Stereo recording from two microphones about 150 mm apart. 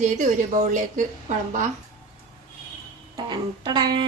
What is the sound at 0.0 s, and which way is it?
A woman's voice, 55° right (ahead or behind).